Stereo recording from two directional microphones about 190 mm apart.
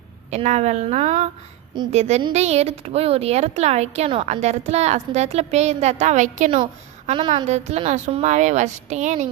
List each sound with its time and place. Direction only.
0.3 s speech: 35° right (ahead or behind)